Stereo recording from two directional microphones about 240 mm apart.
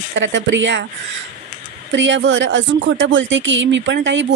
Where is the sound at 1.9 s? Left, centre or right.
Right.